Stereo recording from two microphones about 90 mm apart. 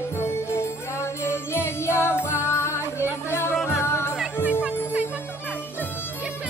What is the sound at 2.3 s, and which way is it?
Music, 30° left (ahead or behind).